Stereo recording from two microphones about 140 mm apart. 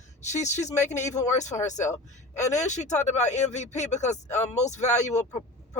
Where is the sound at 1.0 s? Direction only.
20° left (ahead or behind).